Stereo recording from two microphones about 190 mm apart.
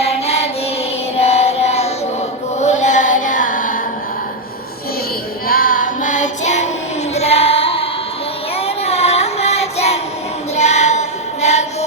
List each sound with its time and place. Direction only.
0.0 s mantra: 35° left (ahead or behind)
1.1 s child singing: 35° left (ahead or behind)
2.6 s carnatic music: 40° left (ahead or behind)
5.5 s child singing: 50° left (ahead or behind)
7.1 s music: 35° left (ahead or behind)
8.5 s child singing: 35° left (ahead or behind)